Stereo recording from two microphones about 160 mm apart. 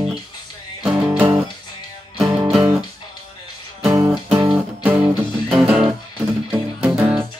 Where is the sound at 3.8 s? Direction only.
20° right (ahead or behind).